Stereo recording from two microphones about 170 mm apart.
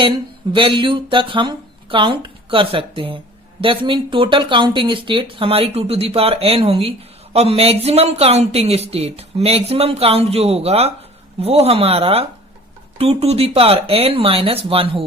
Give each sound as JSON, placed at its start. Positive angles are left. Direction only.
{"t": 0.5, "sound": "speech", "side_deg": -30}